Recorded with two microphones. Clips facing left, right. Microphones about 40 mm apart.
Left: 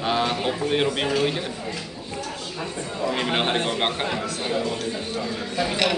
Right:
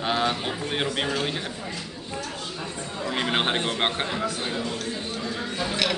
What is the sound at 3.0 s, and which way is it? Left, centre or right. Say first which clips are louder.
Speech: left 1 dB; centre.